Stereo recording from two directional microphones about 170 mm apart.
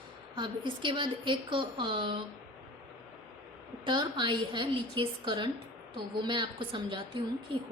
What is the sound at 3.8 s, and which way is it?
A woman's voice, 25° right (ahead or behind).